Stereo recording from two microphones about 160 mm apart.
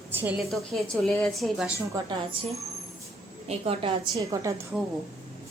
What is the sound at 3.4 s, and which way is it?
Speech, 40° right (ahead or behind).